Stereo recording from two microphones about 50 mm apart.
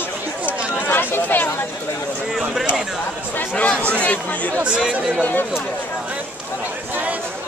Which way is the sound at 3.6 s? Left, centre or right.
Left.